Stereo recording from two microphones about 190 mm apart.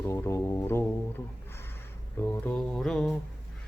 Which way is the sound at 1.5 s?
10° left (ahead or behind).